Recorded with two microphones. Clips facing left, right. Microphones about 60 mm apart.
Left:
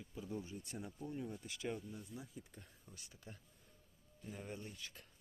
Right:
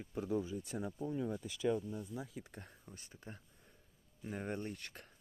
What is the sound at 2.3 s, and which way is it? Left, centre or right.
Speech, right.